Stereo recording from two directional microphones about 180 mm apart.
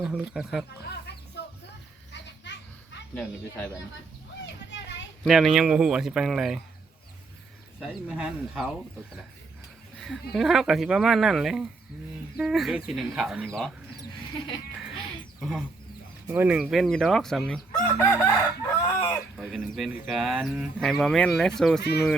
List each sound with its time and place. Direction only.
0.0 s speech: 5° right (ahead or behind)
1.1 s a sound: 65° left (ahead or behind)
2.2 s children playing: 75° left (ahead or behind)
5.2 s speech: centre (ahead or behind)
7.8 s speech: 5° right (ahead or behind)
10.0 s speech: centre (ahead or behind)
14.4 s music: 25° left (ahead or behind)
15.4 s speech: centre (ahead or behind)
17.9 s chicken: 10° left (ahead or behind)
19.4 s speech: centre (ahead or behind)
21.8 s speech: 65° left (ahead or behind)